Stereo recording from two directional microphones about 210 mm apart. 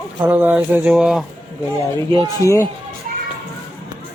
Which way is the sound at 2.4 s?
15° left (ahead or behind).